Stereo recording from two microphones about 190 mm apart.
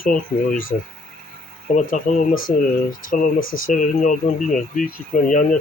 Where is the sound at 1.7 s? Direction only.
45° left (ahead or behind).